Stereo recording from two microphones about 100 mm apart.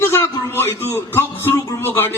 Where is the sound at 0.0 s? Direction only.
20° left (ahead or behind).